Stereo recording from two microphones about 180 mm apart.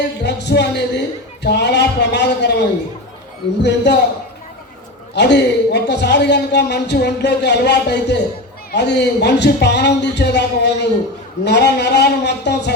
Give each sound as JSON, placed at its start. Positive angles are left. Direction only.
{"t": 0.2, "sound": "a man's voice", "side_deg": 70}
{"t": 5.1, "sound": "a man's voice", "side_deg": 70}